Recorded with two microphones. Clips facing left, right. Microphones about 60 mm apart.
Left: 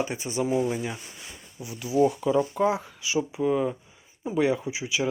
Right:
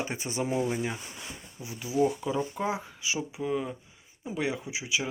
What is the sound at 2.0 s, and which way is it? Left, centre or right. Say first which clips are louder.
Speech: left 4 dB; centre.